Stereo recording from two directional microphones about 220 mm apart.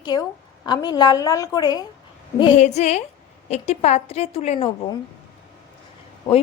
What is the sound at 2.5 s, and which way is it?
A woman's voice, 30° left (ahead or behind).